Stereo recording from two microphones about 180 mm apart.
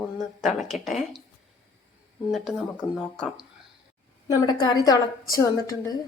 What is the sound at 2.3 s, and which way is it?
Speech, centre (ahead or behind).